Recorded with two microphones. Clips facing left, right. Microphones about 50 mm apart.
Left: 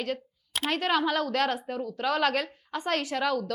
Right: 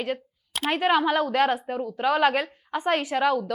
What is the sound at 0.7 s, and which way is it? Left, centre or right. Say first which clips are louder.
A woman's voice: right 5 dB; centre.